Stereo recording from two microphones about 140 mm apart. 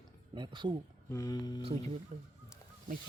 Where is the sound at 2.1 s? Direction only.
70° right (ahead or behind).